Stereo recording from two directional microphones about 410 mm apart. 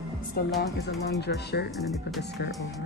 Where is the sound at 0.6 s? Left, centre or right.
Left.